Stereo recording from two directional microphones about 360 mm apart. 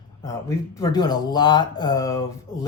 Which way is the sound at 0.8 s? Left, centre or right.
Centre.